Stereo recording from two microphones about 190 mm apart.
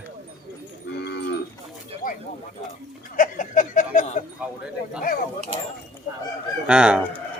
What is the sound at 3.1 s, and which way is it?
Chuckle, 45° left (ahead or behind).